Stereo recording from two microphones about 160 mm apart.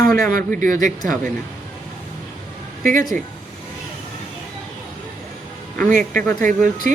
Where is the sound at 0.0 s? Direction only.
60° right (ahead or behind).